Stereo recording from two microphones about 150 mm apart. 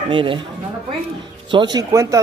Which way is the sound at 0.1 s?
35° right (ahead or behind).